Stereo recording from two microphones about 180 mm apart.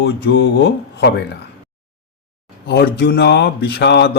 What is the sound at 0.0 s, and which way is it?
Speech, 65° left (ahead or behind).